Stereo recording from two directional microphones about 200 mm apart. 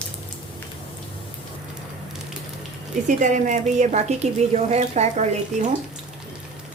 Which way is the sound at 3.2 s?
40° right (ahead or behind).